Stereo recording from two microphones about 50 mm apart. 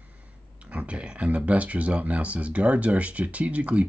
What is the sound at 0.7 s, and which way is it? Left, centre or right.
Speech, right.